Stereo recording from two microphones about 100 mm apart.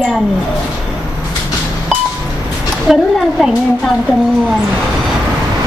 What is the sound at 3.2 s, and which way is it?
Speech, centre (ahead or behind).